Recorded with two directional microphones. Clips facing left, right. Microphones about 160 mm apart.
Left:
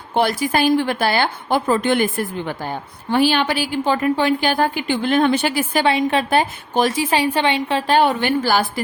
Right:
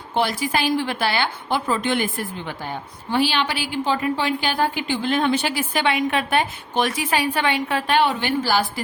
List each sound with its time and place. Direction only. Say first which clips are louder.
0.1 s a woman's voice: left 4 dB; 50° left (ahead or behind); by 7.9 s 25° left (ahead or behind)
7.9 s a woman's voice: left 3 dB; 50° left (ahead or behind)